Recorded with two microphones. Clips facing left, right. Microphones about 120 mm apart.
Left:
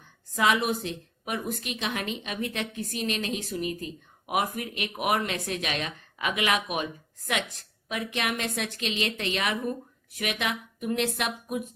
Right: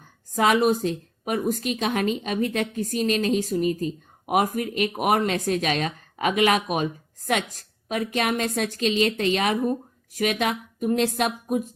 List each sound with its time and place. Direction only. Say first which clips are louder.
0.0 s a woman's voice: right 4 dB; 40° right (ahead or behind)